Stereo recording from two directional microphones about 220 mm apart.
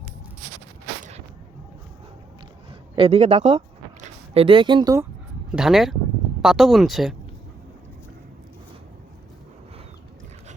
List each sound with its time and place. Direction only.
2.9 s a man's voice: 25° right (ahead or behind)
5.5 s speech: centre (ahead or behind)